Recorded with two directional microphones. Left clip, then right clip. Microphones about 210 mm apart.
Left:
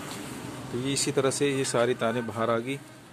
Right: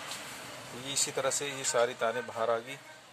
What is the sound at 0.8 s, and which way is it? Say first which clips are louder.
Speech: left 5 dB; 5° left (ahead or behind).